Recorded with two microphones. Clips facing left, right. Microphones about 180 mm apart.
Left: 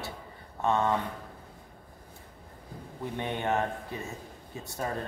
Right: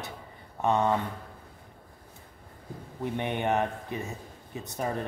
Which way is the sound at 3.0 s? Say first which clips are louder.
Right 3 dB; 15° right (ahead or behind).